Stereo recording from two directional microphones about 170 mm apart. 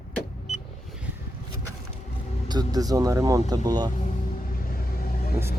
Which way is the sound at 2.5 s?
20° right (ahead or behind).